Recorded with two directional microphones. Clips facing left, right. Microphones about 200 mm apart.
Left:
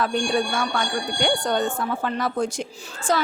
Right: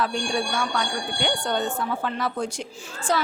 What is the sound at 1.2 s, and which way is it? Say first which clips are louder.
A woman's voice: left 3 dB; 45° left (ahead or behind).